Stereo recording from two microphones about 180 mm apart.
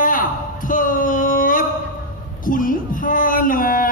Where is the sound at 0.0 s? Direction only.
50° left (ahead or behind).